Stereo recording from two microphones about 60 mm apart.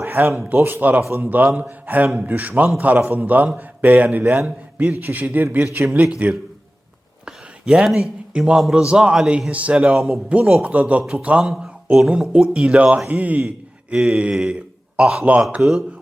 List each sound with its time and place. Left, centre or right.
0.0 s a man's voice: right
5.0 s a man's voice: right
5.3 s a man's voice: right
7.3 s a sound: centre
7.9 s a man's voice: centre
9.9 s speech: centre
10.2 s a man's voice: right
13.9 s speech: centre
14.5 s a sound: centre
15.6 s a man's voice: right